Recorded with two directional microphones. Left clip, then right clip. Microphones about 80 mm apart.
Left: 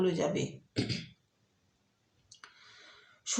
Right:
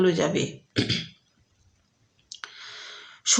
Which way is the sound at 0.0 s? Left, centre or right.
Right.